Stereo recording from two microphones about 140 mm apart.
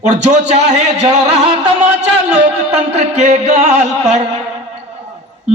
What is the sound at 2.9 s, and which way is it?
A man's voice, 55° right (ahead or behind).